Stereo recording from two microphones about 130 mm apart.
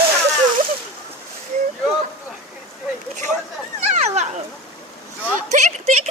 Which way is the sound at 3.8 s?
60° right (ahead or behind).